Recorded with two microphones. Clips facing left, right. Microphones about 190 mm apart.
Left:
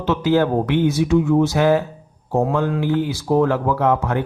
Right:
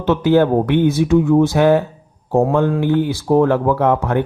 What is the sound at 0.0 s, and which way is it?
Speech, 55° right (ahead or behind).